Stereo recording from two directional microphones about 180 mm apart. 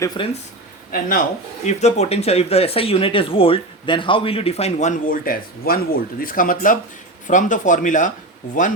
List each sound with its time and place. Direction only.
0.0 s speech: 20° left (ahead or behind)
0.9 s speech: 50° left (ahead or behind)
1.6 s speech: 40° left (ahead or behind)